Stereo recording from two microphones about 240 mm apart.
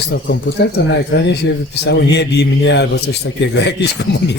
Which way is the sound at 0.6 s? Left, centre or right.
Left.